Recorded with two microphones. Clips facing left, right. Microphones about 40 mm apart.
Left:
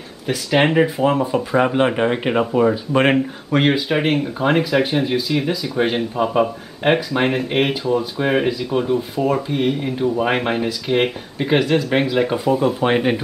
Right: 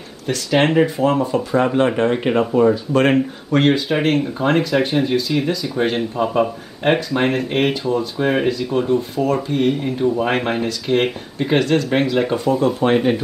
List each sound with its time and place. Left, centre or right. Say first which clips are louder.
0.3 s speech: even; centre
2.9 s speech: even; left
3.5 s speech: right 1 dB; centre